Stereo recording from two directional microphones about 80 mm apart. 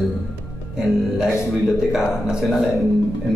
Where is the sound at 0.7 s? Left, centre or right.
Centre.